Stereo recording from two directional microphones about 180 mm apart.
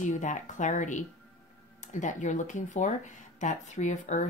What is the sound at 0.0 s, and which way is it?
Speech, 45° left (ahead or behind).